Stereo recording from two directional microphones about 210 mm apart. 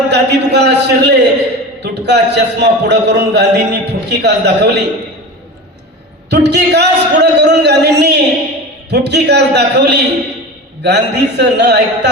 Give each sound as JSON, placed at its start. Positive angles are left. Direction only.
{"t": 0.1, "sound": "a man's voice", "side_deg": -55}
{"t": 6.3, "sound": "a man's voice", "side_deg": -55}